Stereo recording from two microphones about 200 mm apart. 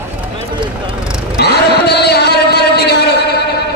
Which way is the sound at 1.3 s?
55° left (ahead or behind).